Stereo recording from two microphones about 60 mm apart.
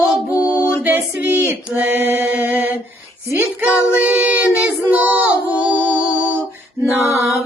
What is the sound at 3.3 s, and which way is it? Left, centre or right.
Child singing, right.